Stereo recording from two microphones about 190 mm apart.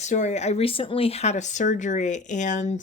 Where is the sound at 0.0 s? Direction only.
40° left (ahead or behind).